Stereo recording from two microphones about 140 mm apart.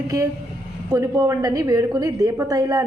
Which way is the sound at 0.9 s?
20° right (ahead or behind).